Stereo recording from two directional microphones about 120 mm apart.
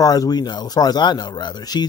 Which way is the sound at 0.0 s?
35° left (ahead or behind).